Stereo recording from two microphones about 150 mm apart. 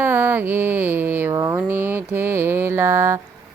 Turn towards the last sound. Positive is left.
turn(degrees=-15)  # may be behind; listen again after turning